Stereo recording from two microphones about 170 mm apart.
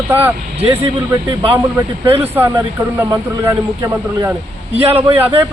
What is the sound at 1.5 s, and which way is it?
Speech, 15° right (ahead or behind).